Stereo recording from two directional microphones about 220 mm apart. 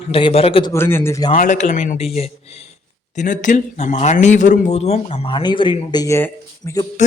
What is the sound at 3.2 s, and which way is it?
Speech, 35° left (ahead or behind).